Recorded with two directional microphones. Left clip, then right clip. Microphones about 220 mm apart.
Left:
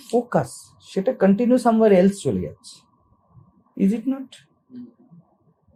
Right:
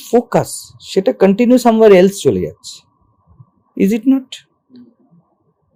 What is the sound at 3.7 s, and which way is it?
Speech, 50° right (ahead or behind).